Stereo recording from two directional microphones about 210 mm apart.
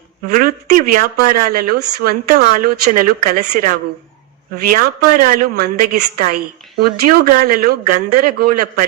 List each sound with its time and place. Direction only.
0.3 s speech: 40° right (ahead or behind)